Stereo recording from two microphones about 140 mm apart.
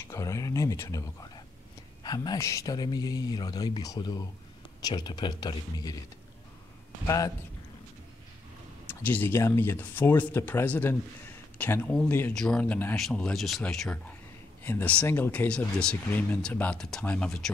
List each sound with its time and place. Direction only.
0.1 s speech: 25° left (ahead or behind)
7.1 s speech: 25° left (ahead or behind)
8.8 s speech: 10° left (ahead or behind)